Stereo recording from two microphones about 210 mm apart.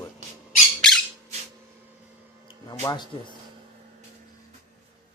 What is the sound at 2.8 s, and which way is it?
Speech, 20° left (ahead or behind).